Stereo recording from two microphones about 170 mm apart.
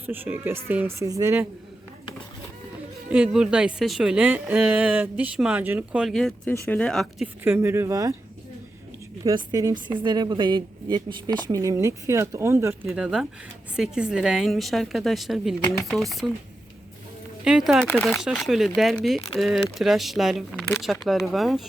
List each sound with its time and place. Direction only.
0.0 s speech: 10° right (ahead or behind)
3.1 s a woman's voice: 5° right (ahead or behind)
7.4 s speech: 15° right (ahead or behind)
9.2 s a woman's voice: 20° right (ahead or behind)
12.9 s a woman's voice: 5° right (ahead or behind)
17.4 s a woman's voice: 5° right (ahead or behind)